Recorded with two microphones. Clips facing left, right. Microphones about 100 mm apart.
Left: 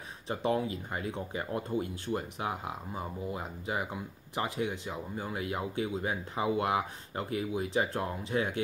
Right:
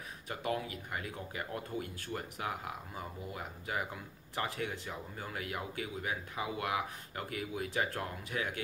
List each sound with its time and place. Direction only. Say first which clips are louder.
0.3 s speech: left 6 dB; 30° left (ahead or behind)